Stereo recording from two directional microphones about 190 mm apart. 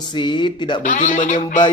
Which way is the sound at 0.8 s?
40° left (ahead or behind).